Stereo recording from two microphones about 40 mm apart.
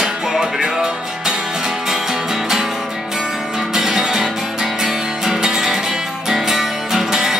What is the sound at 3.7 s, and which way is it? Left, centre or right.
Music, centre.